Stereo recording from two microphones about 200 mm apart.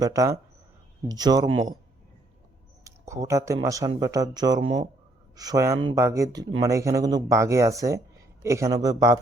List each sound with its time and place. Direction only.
0.0 s speech: 15° right (ahead or behind)
2.8 s speech: 15° right (ahead or behind)